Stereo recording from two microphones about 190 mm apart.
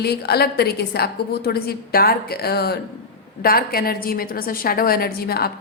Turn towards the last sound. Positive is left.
turn(degrees=55)  # may be behind; listen again after turning